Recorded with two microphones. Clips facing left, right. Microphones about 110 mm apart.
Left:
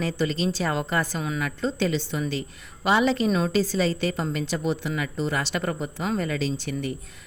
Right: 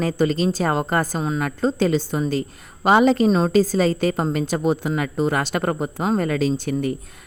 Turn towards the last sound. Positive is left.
turn(degrees=-45)  # may be behind; listen again after turning